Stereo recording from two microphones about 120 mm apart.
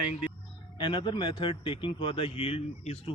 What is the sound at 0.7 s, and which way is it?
Speech, 40° left (ahead or behind).